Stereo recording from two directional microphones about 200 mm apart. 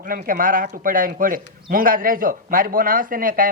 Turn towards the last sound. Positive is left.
turn(degrees=-45)  # may be behind; listen again after turning